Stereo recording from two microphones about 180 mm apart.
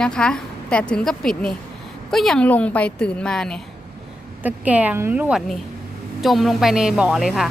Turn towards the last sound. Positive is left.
turn(degrees=0)  # may be behind; listen again after turning